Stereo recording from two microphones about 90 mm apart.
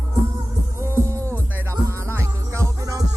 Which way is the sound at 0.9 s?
30° right (ahead or behind).